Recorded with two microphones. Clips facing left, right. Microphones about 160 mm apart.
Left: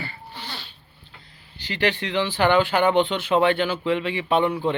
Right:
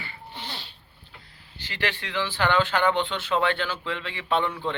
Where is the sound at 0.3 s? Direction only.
25° right (ahead or behind).